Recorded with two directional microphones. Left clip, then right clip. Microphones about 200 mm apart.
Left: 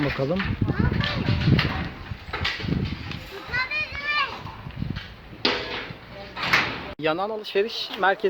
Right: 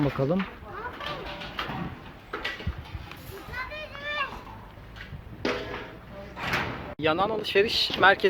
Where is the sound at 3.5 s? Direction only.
40° right (ahead or behind).